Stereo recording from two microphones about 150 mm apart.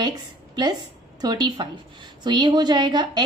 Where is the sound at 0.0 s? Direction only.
30° right (ahead or behind).